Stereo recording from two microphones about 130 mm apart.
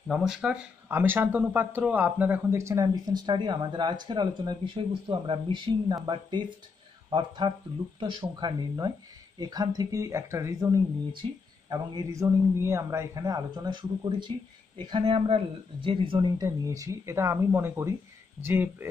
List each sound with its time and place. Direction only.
0.1 s speech: 5° right (ahead or behind); by 16.3 s 40° right (ahead or behind)
16.3 s speech: 25° right (ahead or behind)